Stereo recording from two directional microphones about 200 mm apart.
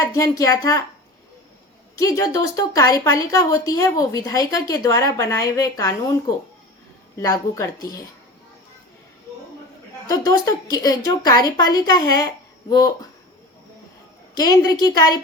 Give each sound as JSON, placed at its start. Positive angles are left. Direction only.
{"t": 0.0, "sound": "a woman's voice", "side_deg": 15}
{"t": 2.0, "sound": "a woman's voice", "side_deg": 15}
{"t": 10.1, "sound": "a woman's voice", "side_deg": 20}
{"t": 14.3, "sound": "a woman's voice", "side_deg": 20}